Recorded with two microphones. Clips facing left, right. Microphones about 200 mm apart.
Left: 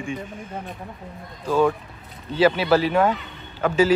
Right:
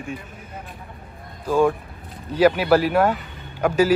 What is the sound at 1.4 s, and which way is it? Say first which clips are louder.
Speech: right 1 dB; 10° right (ahead or behind).